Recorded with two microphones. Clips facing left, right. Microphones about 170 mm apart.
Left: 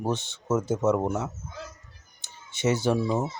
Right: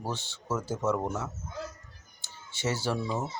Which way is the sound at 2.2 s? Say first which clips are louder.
Left 6 dB; 20° left (ahead or behind).